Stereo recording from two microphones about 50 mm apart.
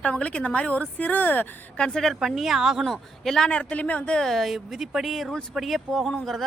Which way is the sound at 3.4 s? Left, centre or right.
Left.